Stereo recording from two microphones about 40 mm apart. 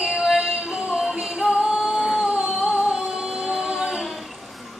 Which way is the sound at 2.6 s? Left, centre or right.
Centre.